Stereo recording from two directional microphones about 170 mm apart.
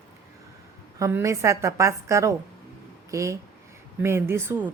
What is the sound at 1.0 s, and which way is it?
A woman's voice, 15° right (ahead or behind).